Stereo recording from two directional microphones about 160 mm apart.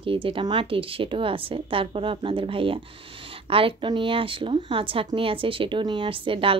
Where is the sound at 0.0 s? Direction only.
35° right (ahead or behind).